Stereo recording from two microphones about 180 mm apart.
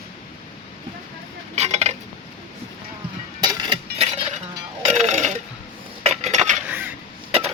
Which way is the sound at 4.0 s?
40° right (ahead or behind).